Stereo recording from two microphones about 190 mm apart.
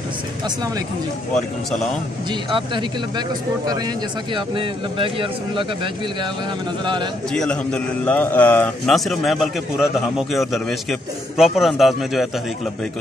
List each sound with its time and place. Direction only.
2.5 s speech: 25° right (ahead or behind)
6.8 s speech: 25° right (ahead or behind)
7.3 s a man's voice: 5° left (ahead or behind)